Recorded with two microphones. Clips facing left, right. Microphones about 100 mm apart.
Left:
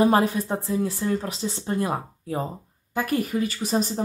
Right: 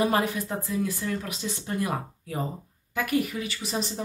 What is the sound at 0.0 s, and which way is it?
Speech, 35° left (ahead or behind).